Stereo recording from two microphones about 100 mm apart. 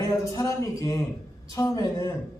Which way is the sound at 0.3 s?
35° left (ahead or behind).